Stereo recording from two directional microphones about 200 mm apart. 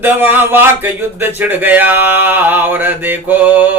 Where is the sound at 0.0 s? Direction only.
10° right (ahead or behind).